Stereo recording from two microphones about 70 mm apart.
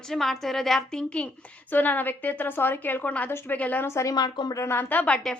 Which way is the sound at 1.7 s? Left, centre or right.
Left.